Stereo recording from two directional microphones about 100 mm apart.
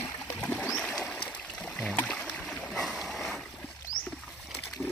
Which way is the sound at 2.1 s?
5° left (ahead or behind).